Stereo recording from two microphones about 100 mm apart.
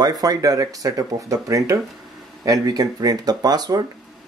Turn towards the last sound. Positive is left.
turn(degrees=-40)  # may be behind; listen again after turning